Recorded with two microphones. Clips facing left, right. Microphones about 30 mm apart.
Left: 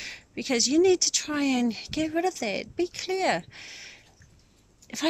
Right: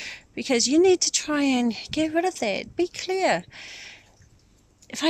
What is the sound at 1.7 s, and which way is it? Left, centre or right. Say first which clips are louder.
Speech: right 4 dB; right.